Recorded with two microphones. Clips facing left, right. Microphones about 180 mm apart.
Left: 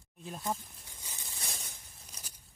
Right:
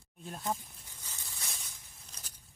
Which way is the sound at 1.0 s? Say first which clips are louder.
Left 1 dB; 15° left (ahead or behind).